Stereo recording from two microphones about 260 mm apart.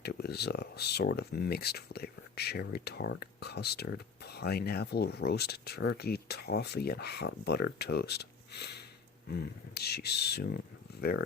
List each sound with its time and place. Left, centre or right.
0.0 s speech: left